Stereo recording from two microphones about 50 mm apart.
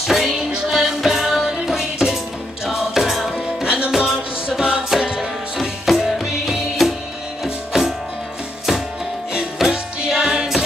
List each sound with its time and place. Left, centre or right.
0.0 s music: centre
3.6 s music: right
9.3 s music: centre